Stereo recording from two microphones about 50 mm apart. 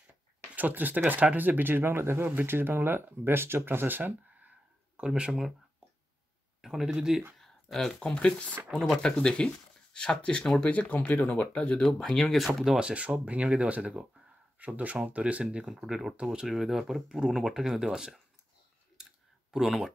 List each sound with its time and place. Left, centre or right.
0.6 s speech: right
5.0 s speech: right
6.6 s speech: centre
7.3 s a sound: centre
8.0 s speech: centre
8.7 s speech: centre; by 11.8 s left
11.8 s speech: centre
12.7 s speech: right
15.8 s speech: centre
19.5 s speech: centre